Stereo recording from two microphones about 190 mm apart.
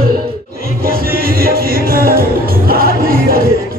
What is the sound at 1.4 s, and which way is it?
Music, 50° right (ahead or behind).